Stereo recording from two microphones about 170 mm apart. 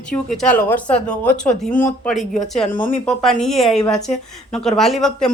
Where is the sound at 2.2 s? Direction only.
45° left (ahead or behind).